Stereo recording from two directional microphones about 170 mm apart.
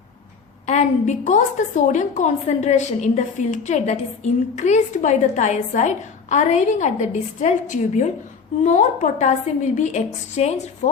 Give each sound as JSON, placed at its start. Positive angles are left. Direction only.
{"t": 0.7, "sound": "a woman's voice", "side_deg": 45}